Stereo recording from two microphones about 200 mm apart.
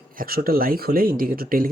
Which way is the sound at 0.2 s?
45° right (ahead or behind).